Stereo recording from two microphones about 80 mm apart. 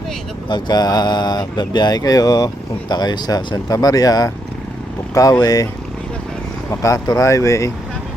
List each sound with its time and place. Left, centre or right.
0.4 s speech: left
5.4 s speech: left
6.7 s speech: left